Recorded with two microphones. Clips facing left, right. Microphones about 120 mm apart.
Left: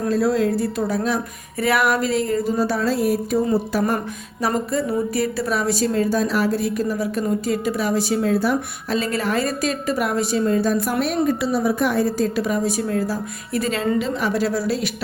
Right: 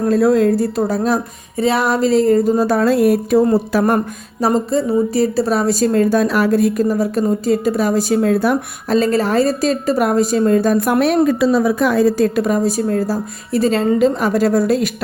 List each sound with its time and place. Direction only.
0.0 s a woman's voice: 50° right (ahead or behind)
1.5 s a woman's voice: 25° right (ahead or behind); by 3.9 s 90° right
4.4 s a woman's voice: 30° right (ahead or behind)
5.9 s a woman's voice: 55° right (ahead or behind)
9.0 s a woman's voice: 35° right (ahead or behind); by 12.3 s 90° right
12.4 s a woman's voice: 45° right (ahead or behind)